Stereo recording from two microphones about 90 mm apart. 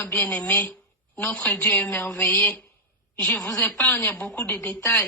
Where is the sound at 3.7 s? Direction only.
20° left (ahead or behind).